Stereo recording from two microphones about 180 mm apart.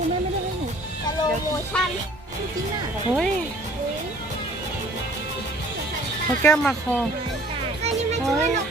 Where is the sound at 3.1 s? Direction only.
Centre (ahead or behind).